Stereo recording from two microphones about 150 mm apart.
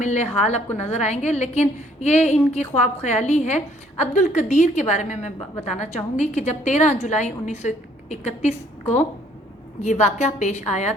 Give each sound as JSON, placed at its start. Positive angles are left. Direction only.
{"t": 0.0, "sound": "a woman's voice", "side_deg": 50}
{"t": 9.8, "sound": "a woman's voice", "side_deg": 50}